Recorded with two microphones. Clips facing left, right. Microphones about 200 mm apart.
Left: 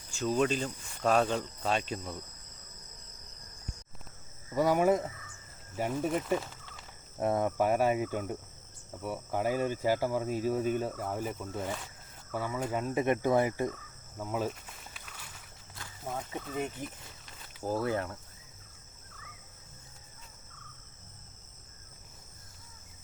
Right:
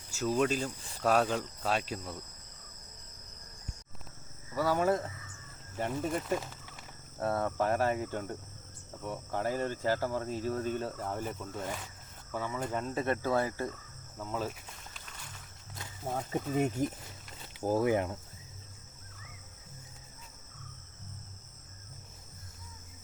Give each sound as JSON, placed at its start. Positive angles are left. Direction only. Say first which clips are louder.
{"t": 0.1, "sound": "speech", "louder": "left 1 dB", "side_deg": -5}
{"t": 4.5, "sound": "speech", "louder": "left 3 dB", "side_deg": 15}
{"t": 7.2, "sound": "speech", "louder": "left 3 dB", "side_deg": 15}
{"t": 14.9, "sound": "wild animals", "louder": "even", "side_deg": 5}
{"t": 16.3, "sound": "speech", "louder": "right 8 dB", "side_deg": -45}
{"t": 17.6, "sound": "speech", "louder": "right 3 dB", "side_deg": -15}